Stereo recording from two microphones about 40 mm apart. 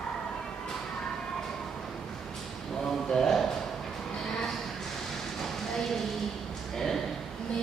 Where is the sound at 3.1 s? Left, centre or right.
Centre.